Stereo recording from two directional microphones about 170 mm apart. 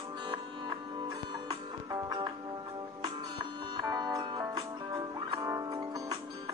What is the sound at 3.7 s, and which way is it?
Music, 25° right (ahead or behind).